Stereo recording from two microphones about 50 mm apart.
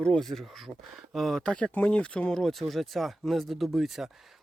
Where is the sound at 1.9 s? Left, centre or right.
Centre.